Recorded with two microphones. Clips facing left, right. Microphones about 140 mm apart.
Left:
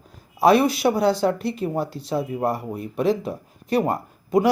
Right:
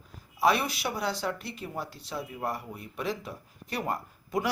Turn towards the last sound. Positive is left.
turn(degrees=25)  # may be behind; listen again after turning